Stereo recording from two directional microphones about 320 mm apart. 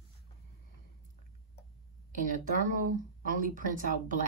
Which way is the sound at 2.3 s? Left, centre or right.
Right.